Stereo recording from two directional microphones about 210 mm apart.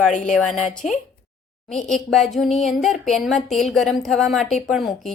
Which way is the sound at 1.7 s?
Centre (ahead or behind).